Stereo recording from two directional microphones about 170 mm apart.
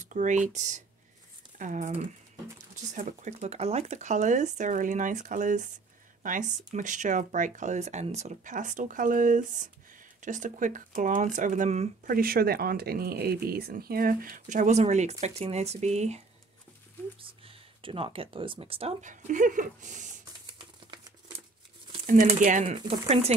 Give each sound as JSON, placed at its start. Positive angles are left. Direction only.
{"t": 0.0, "sound": "speech", "side_deg": -45}
{"t": 12.1, "sound": "speech", "side_deg": -60}
{"t": 17.2, "sound": "speech", "side_deg": -30}
{"t": 20.5, "sound": "typewriter", "side_deg": -30}
{"t": 22.0, "sound": "speech", "side_deg": -50}